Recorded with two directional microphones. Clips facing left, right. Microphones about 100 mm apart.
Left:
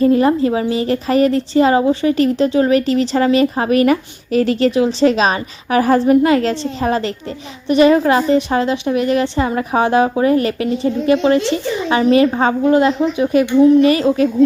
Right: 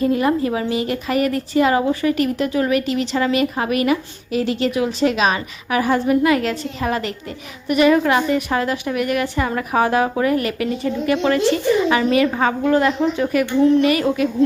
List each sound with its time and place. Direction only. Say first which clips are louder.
0.0 s a woman's voice: left 5 dB; 35° left (ahead or behind); by 13.7 s 15° left (ahead or behind)
13.8 s a woman's voice: left 4 dB; 30° left (ahead or behind)